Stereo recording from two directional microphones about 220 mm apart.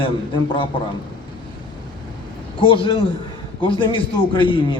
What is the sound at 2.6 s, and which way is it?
A man's voice, 25° left (ahead or behind).